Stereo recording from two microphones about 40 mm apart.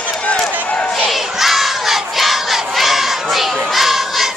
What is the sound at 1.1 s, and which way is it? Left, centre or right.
Crowd, centre.